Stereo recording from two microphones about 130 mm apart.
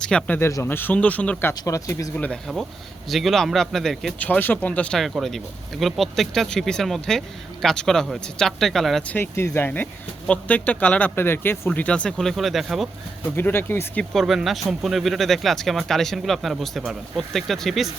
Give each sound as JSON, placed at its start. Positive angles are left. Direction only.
{"t": 0.0, "sound": "speech", "side_deg": 5}
{"t": 2.1, "sound": "a man's voice", "side_deg": 10}
{"t": 9.0, "sound": "speech", "side_deg": 15}
{"t": 13.3, "sound": "speech", "side_deg": 15}
{"t": 14.0, "sound": "a man's voice", "side_deg": 0}